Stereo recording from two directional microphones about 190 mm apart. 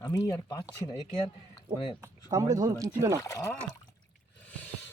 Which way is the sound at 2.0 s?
15° right (ahead or behind).